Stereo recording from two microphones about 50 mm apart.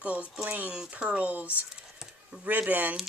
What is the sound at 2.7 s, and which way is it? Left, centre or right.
Speech, right.